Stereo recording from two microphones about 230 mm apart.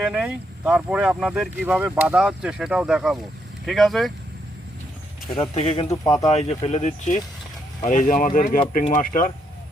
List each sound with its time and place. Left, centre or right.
0.0 s speech: centre
5.4 s a man's voice: left
6.3 s a man's voice: left